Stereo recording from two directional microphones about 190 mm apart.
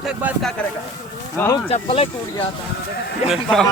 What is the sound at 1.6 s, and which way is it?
Speech, 30° left (ahead or behind).